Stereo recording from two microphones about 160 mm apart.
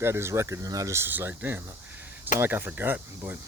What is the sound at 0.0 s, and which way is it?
Speech, 15° right (ahead or behind).